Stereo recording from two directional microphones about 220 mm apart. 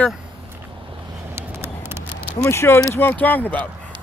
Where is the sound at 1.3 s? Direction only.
10° right (ahead or behind).